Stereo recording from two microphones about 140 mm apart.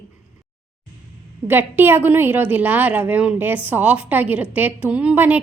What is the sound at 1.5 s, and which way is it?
A woman's voice, 15° right (ahead or behind).